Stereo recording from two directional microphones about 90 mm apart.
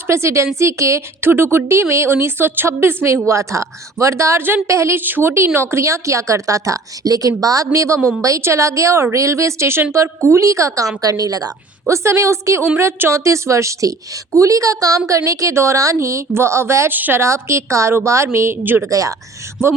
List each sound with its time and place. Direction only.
0.1 s a woman's voice: 30° right (ahead or behind)
18.9 s a woman's voice: 40° right (ahead or behind)